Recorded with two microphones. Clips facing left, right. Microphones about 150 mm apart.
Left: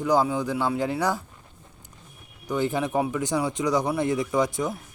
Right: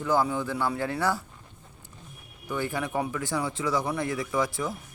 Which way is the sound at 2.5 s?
20° left (ahead or behind).